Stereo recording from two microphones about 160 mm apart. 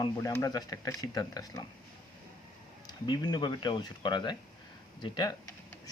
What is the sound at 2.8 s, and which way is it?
Speech, 25° left (ahead or behind).